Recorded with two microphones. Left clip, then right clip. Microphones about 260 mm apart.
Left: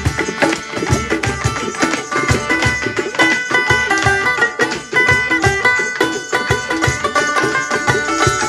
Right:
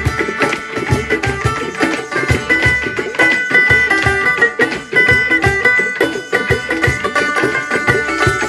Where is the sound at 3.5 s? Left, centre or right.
Centre.